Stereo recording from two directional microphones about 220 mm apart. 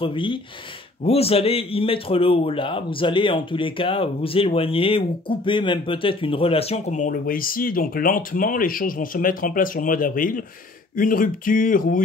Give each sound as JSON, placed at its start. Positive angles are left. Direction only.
{"t": 0.0, "sound": "a man's voice", "side_deg": 25}